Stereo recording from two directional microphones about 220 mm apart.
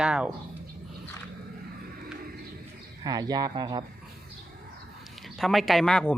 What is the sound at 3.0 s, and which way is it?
Speech, 15° right (ahead or behind).